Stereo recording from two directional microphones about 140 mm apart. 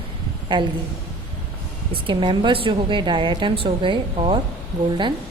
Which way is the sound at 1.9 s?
35° right (ahead or behind).